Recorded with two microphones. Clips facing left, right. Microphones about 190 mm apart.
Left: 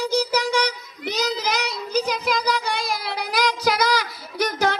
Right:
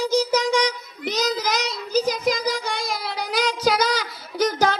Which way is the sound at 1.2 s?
60° left (ahead or behind).